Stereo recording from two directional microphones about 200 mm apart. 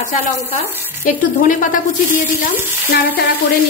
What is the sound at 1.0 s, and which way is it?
Speech, 40° left (ahead or behind).